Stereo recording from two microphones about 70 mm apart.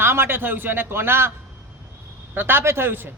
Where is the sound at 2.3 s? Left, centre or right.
Right.